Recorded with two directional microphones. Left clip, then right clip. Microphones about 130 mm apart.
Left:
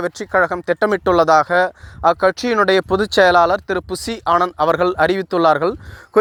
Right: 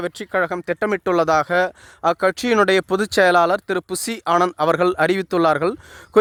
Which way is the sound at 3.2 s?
55° right (ahead or behind).